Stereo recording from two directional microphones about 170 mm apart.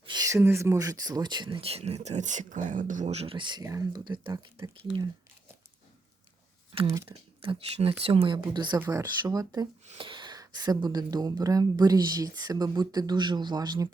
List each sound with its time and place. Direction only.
0.0 s speech: 25° right (ahead or behind)
6.8 s speech: 20° right (ahead or behind)
7.1 s speech: 35° right (ahead or behind)
9.8 s speech: 35° right (ahead or behind)